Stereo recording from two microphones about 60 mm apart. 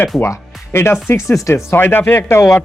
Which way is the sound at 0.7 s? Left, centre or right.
Left.